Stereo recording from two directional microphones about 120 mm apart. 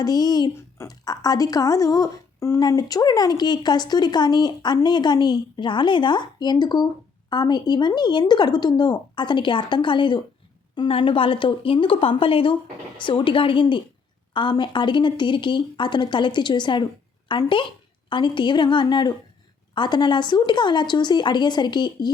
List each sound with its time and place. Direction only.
0.0 s a woman's voice: 35° left (ahead or behind)